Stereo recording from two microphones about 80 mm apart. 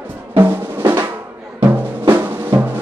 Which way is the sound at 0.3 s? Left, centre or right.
Right.